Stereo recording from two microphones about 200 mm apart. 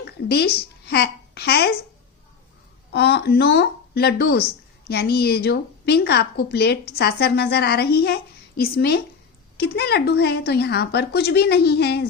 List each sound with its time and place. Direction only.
0.0 s speech: 55° left (ahead or behind)
2.9 s a woman's voice: 55° left (ahead or behind)